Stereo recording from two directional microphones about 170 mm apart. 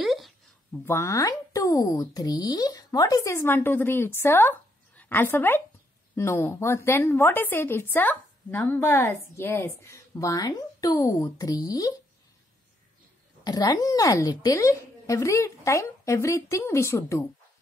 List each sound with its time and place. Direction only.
0.0 s a sound: centre (ahead or behind)
0.8 s speech: 15° left (ahead or behind)
13.4 s speech: 20° left (ahead or behind)